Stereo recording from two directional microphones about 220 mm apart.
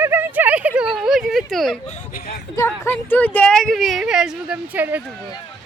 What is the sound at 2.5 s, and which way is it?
Speech, 10° left (ahead or behind).